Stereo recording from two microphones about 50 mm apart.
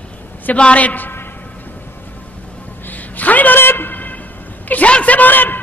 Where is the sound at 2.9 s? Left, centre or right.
Left.